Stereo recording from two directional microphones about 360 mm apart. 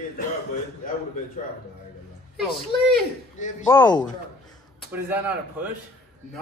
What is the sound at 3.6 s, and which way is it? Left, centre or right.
Speech, centre.